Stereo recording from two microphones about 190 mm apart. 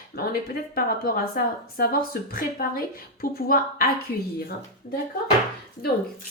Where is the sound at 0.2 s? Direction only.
50° left (ahead or behind).